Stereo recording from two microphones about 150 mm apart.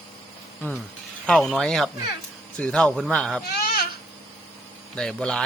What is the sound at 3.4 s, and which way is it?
Goat, 90° left.